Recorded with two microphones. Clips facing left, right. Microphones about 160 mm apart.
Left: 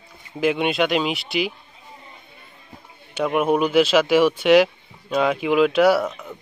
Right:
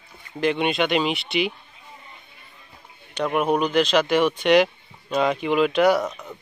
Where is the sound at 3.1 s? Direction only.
5° left (ahead or behind).